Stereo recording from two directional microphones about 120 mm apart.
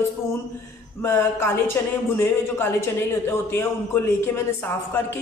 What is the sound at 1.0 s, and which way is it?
A woman's voice, 20° left (ahead or behind).